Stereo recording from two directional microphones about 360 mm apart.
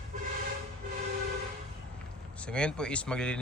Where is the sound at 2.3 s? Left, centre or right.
Centre.